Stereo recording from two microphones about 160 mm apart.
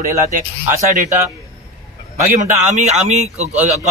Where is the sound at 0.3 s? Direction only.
50° right (ahead or behind).